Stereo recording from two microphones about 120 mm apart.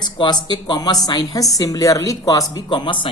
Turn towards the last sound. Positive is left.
turn(degrees=40)  # may be behind; listen again after turning